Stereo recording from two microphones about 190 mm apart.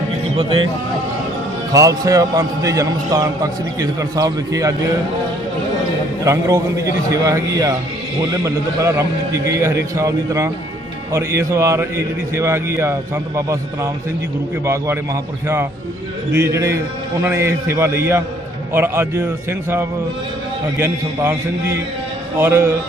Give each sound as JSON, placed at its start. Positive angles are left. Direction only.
{"t": 0.3, "sound": "speech", "side_deg": -25}
{"t": 1.7, "sound": "a man's voice", "side_deg": -20}
{"t": 6.2, "sound": "a man's voice", "side_deg": -15}